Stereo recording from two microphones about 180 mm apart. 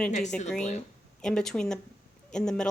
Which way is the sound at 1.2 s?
5° left (ahead or behind).